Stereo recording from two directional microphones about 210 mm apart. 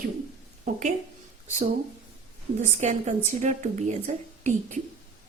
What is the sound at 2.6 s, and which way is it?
A woman's voice, 35° right (ahead or behind).